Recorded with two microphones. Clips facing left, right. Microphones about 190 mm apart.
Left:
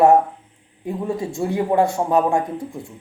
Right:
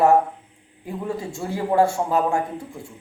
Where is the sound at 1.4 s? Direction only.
20° left (ahead or behind).